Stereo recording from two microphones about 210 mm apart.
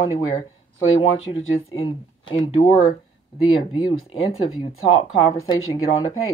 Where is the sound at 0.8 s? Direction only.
75° left (ahead or behind).